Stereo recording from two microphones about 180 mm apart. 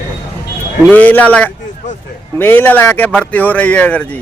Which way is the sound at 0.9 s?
10° left (ahead or behind).